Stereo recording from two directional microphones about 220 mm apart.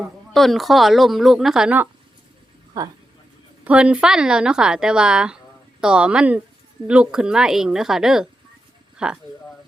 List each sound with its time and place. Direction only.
0.3 s a woman's voice: centre (ahead or behind)
2.8 s speech: 15° right (ahead or behind)
3.6 s a woman's voice: 5° right (ahead or behind)